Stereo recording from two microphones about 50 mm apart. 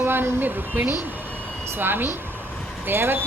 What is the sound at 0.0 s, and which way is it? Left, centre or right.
A woman's voice, right.